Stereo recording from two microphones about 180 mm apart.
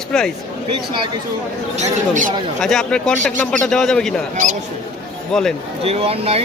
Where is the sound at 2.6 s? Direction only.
Centre (ahead or behind).